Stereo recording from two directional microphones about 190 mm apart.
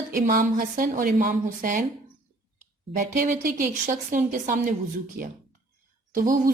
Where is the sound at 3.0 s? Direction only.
40° right (ahead or behind).